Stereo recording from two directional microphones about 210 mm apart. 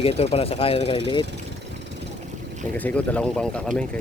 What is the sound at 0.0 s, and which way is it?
Speech, 30° left (ahead or behind).